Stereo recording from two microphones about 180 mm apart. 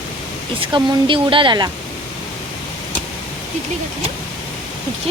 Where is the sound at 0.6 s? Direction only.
30° right (ahead or behind).